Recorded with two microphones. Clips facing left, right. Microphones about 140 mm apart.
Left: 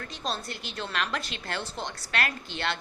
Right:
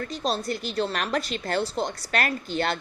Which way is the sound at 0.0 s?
35° right (ahead or behind).